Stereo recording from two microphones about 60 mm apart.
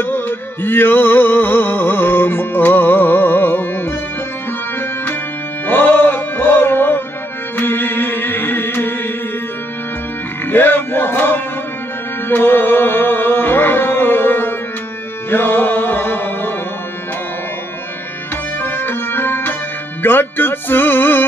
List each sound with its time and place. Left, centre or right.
0.0 s music: left
5.7 s music: left
10.5 s a sound: left
12.3 s music: left
18.6 s music: left